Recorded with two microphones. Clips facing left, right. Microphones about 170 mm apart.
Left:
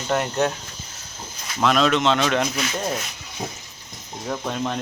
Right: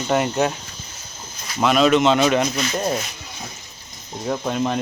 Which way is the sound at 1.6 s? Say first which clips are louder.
Right 3 dB; 5° right (ahead or behind).